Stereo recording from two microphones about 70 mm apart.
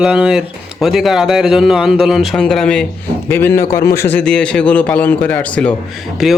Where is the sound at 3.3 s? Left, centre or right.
Left.